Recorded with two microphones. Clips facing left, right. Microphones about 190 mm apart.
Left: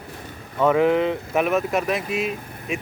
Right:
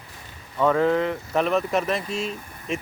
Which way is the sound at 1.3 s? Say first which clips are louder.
Even; 5° left (ahead or behind).